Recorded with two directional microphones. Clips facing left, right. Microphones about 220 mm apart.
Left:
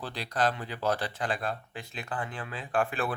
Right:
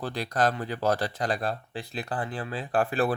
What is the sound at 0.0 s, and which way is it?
Speech, 45° right (ahead or behind).